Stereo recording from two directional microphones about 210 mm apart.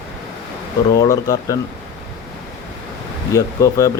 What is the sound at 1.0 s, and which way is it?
Speech, 15° left (ahead or behind).